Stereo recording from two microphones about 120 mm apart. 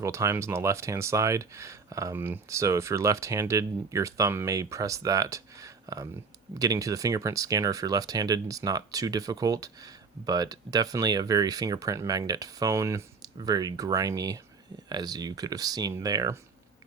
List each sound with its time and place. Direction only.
0.0 s speech: 25° right (ahead or behind)